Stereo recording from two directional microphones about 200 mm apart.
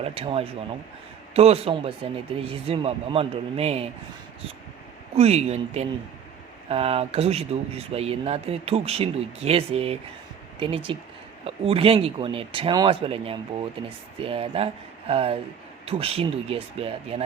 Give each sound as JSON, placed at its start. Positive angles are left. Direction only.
{"t": 0.0, "sound": "speech", "side_deg": -30}
{"t": 5.1, "sound": "speech", "side_deg": -30}